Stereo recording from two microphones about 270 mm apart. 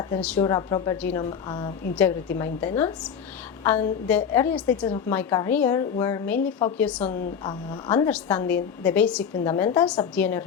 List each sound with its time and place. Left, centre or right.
0.3 s a woman's voice: centre